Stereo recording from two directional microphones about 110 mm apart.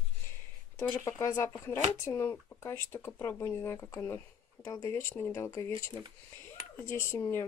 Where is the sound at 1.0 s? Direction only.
30° left (ahead or behind).